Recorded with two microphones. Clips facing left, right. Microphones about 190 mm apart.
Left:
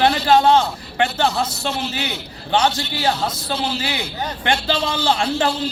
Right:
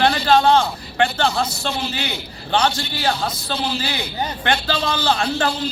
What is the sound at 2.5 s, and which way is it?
A man's voice, 20° left (ahead or behind).